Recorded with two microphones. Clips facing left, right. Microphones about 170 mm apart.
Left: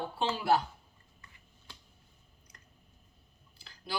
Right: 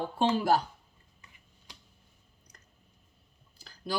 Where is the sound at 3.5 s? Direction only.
45° right (ahead or behind).